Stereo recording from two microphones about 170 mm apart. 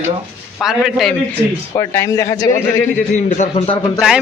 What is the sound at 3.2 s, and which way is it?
Speech, 45° left (ahead or behind).